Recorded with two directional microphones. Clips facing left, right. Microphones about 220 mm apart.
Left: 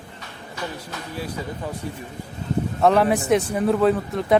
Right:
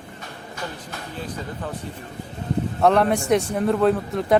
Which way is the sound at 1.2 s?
10° left (ahead or behind).